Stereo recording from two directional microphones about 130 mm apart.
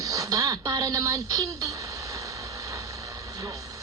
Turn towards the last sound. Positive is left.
turn(degrees=-25)  # may be behind; listen again after turning